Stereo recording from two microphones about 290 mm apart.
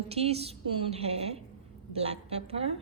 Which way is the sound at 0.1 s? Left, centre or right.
Right.